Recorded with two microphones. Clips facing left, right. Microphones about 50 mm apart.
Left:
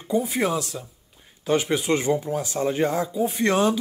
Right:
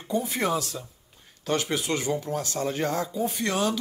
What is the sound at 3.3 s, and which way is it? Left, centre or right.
Speech, left.